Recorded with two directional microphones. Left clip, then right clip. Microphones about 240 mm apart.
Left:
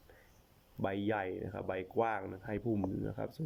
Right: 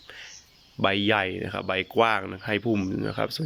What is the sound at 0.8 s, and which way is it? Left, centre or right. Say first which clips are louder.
Speech: right 13 dB; right.